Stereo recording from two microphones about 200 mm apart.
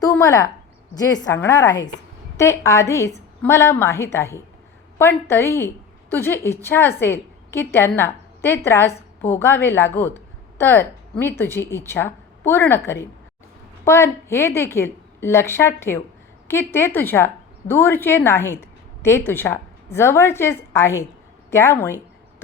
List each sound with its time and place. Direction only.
0.0 s a woman's voice: 15° left (ahead or behind)